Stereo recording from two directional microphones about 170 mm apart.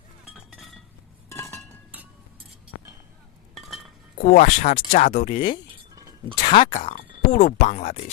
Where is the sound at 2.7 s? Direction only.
90° left.